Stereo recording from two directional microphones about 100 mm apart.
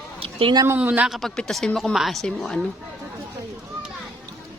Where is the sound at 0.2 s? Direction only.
70° right (ahead or behind).